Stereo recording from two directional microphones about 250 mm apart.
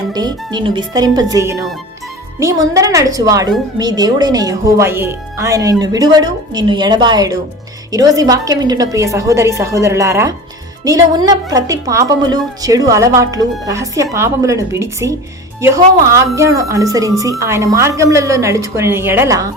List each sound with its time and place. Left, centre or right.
0.1 s a woman's voice: centre